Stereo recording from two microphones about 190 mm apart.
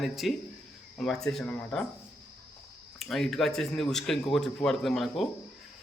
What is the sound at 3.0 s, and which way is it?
Speech, centre (ahead or behind).